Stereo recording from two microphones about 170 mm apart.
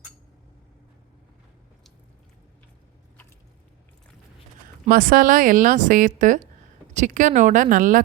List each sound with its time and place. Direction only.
4.9 s a woman's voice: 55° right (ahead or behind)